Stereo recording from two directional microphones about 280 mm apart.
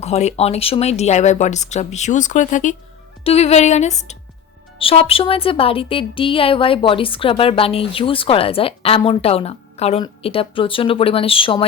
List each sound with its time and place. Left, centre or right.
0.0 s a woman's voice: left